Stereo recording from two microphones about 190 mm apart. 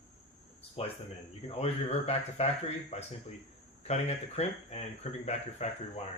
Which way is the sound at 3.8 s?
35° left (ahead or behind).